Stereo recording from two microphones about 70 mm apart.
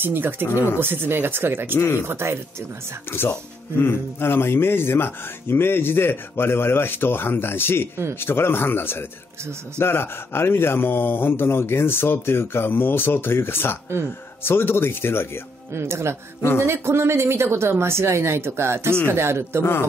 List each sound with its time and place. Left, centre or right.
0.0 s speech: right
3.1 s speech: left
15.7 s speech: right